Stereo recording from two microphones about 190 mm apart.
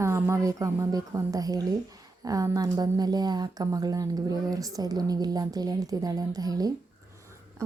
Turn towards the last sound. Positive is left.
turn(degrees=-20)  # may be behind; listen again after turning